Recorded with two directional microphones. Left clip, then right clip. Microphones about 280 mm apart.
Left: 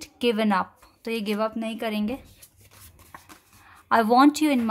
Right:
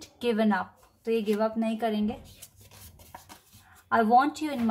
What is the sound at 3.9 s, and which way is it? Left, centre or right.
Speech, left.